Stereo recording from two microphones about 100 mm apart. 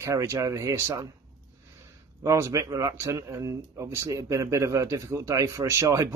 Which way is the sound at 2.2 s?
30° right (ahead or behind).